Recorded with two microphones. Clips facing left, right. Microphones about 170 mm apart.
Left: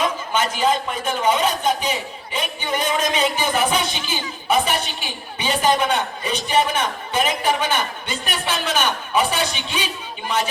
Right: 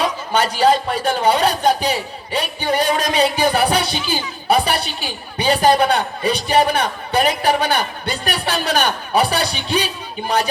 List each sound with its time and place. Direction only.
0.0 s a man's voice: 35° right (ahead or behind)